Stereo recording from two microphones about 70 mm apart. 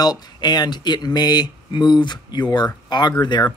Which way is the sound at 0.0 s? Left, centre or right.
Left.